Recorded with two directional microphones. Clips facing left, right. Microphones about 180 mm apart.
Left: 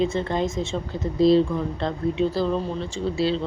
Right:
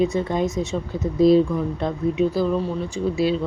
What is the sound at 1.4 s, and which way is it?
A woman's voice, 5° right (ahead or behind).